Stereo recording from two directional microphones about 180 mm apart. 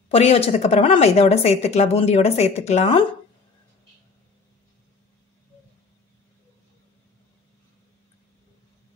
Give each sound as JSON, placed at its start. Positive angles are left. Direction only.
{"t": 0.1, "sound": "a woman's voice", "side_deg": 35}